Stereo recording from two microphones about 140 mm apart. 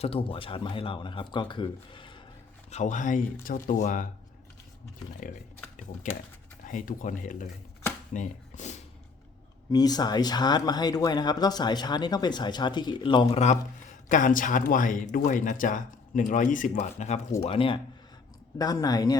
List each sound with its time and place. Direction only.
0.0 s speech: 40° left (ahead or behind)
2.6 s a man's voice: 55° left (ahead or behind)
3.4 s speech: 80° left
6.7 s speech: 70° left (ahead or behind)
9.7 s speech: 30° left (ahead or behind)
14.1 s speech: 70° left (ahead or behind)
16.7 s a man's voice: 55° left (ahead or behind)
17.4 s speech: 40° left (ahead or behind)
18.6 s speech: 25° left (ahead or behind)